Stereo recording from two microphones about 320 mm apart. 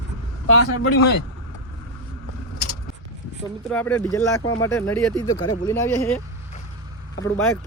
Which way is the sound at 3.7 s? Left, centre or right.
Centre.